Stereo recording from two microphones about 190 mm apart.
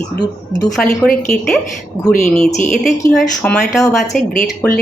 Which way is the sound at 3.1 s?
5° left (ahead or behind).